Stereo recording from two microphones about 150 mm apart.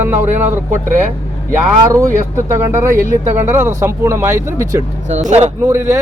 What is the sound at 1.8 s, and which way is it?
Speech, 20° right (ahead or behind).